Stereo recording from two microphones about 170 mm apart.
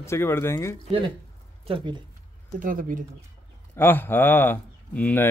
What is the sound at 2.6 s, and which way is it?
Speech, 55° right (ahead or behind).